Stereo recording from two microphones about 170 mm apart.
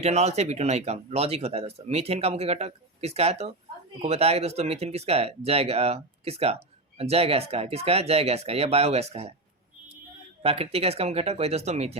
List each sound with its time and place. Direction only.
0.0 s speech: 40° right (ahead or behind)
10.4 s speech: 35° right (ahead or behind)